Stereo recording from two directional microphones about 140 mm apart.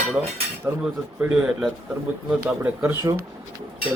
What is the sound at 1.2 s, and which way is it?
Speech, 10° right (ahead or behind).